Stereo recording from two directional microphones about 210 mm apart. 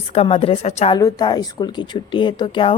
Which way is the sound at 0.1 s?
30° left (ahead or behind).